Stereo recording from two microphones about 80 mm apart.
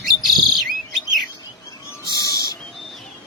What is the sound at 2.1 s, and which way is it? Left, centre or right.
Bird, left.